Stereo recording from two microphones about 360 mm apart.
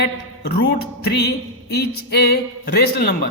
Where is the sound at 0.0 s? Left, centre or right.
Left.